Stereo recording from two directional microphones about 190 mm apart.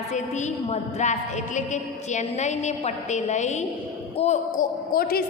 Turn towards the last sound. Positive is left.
turn(degrees=50)  # may be behind; listen again after turning